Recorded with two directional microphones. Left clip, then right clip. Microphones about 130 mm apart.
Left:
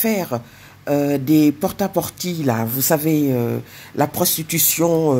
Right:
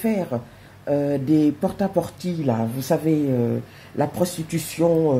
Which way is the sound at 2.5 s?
40° left (ahead or behind).